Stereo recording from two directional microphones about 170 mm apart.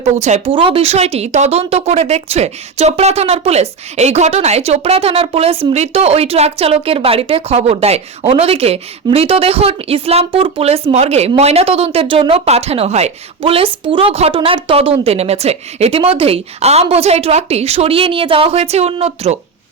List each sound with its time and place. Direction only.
0.0 s a woman's voice: 40° right (ahead or behind)